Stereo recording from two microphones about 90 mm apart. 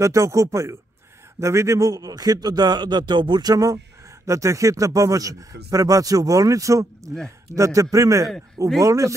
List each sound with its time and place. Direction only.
0.0 s a man's voice: 35° right (ahead or behind)